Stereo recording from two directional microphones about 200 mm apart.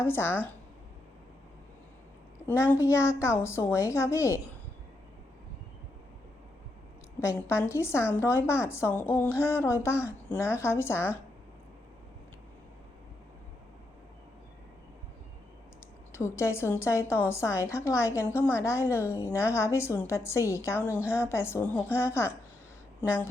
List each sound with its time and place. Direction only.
0.0 s a woman's voice: 10° left (ahead or behind)
2.5 s a woman's voice: 10° left (ahead or behind)
7.2 s a woman's voice: 15° left (ahead or behind)
16.1 s a woman's voice: 15° left (ahead or behind)